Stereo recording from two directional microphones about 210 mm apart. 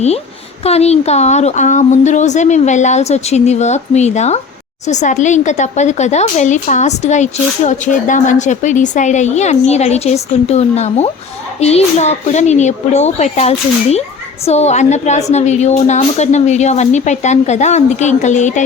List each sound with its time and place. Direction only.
0.6 s speech: 30° left (ahead or behind)